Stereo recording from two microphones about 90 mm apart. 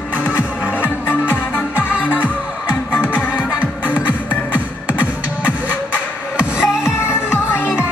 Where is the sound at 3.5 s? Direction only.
15° right (ahead or behind).